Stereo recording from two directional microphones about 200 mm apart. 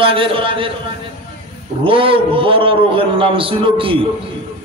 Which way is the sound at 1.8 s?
25° right (ahead or behind).